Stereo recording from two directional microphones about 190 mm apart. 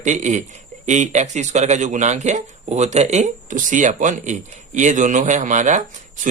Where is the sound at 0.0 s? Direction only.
40° right (ahead or behind).